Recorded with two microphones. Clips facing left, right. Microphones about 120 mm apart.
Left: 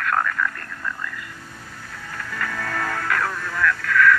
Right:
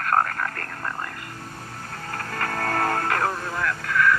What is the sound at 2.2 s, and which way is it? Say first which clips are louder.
Music: right 1 dB; 50° right (ahead or behind).